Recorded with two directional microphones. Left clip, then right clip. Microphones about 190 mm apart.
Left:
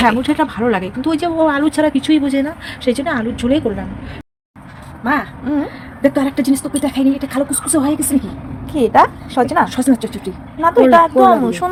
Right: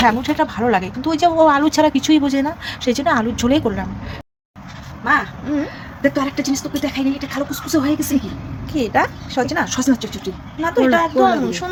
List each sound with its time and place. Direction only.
0.0 s speech: 15° left (ahead or behind); by 3.6 s 15° right (ahead or behind)
5.5 s a sound: 15° left (ahead or behind)
6.1 s a woman's voice: 30° left (ahead or behind)
9.8 s speech: 10° left (ahead or behind)
10.6 s a woman's voice: 20° left (ahead or behind)